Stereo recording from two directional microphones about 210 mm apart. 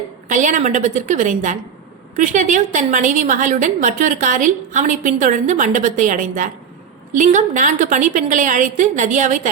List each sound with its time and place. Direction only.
0.3 s a woman's voice: 35° right (ahead or behind)